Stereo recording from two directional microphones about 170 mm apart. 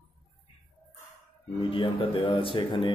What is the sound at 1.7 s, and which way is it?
Speech, 30° left (ahead or behind).